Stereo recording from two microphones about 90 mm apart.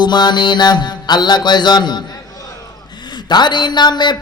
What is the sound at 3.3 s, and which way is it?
Mantra, 55° left (ahead or behind).